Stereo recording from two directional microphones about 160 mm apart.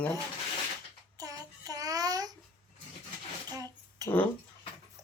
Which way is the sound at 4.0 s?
25° right (ahead or behind).